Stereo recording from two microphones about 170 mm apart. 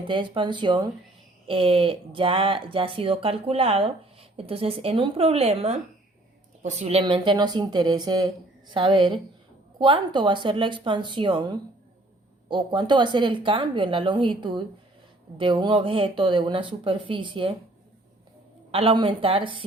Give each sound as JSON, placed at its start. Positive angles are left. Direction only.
{"t": 0.1, "sound": "a woman's voice", "side_deg": -30}
{"t": 7.0, "sound": "a woman's voice", "side_deg": -25}
{"t": 18.7, "sound": "speech", "side_deg": -35}